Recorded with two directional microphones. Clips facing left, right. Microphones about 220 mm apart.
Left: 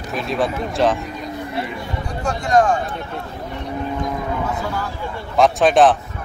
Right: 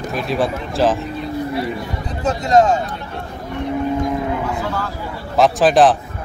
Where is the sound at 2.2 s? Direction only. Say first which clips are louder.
Right 3 dB; 25° right (ahead or behind).